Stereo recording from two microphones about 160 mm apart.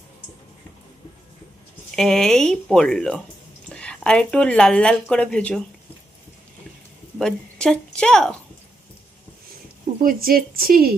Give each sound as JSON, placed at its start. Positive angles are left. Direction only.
{"t": 2.0, "sound": "speech", "side_deg": 5}
{"t": 7.2, "sound": "a woman's voice", "side_deg": 5}
{"t": 10.0, "sound": "speech", "side_deg": -65}